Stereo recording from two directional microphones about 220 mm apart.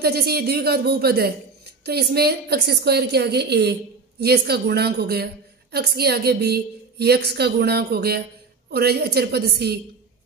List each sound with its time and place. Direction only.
0.0 s a woman's voice: 45° right (ahead or behind)